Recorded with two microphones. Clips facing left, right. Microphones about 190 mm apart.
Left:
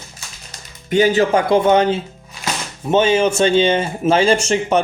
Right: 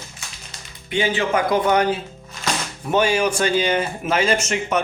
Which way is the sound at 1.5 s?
25° left (ahead or behind).